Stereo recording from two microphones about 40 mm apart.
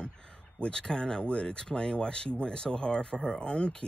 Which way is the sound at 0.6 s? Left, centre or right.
Left.